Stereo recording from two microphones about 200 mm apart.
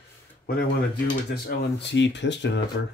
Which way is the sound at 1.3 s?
50° left (ahead or behind).